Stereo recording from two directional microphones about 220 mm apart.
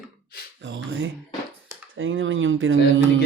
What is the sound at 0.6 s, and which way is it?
Speech, 55° right (ahead or behind).